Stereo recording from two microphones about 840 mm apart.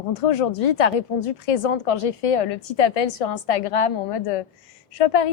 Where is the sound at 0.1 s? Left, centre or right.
Left.